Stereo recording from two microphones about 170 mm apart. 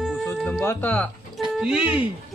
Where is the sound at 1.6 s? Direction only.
5° right (ahead or behind).